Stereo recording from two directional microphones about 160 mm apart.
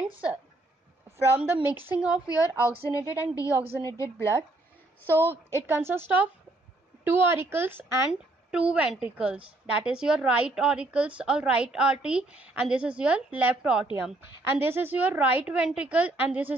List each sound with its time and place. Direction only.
1.3 s a woman's voice: 10° right (ahead or behind)
2.2 s a woman's voice: 20° left (ahead or behind)
5.6 s a woman's voice: 15° right (ahead or behind)
8.1 s a woman's voice: 5° right (ahead or behind)